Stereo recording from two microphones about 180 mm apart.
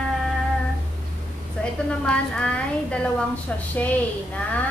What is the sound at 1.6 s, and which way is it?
A woman's voice, 5° left (ahead or behind).